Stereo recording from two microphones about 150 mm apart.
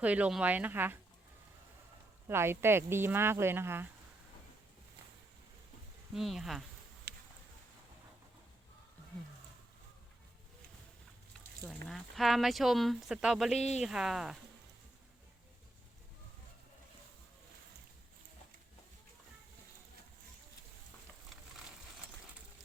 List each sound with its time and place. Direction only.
0.0 s speech: 10° right (ahead or behind)
2.2 s speech: 15° right (ahead or behind)
6.1 s speech: centre (ahead or behind)
7.1 s a sound: 90° right
11.9 s speech: centre (ahead or behind)
13.6 s speech: 45° left (ahead or behind)
13.8 s speech: 5° right (ahead or behind)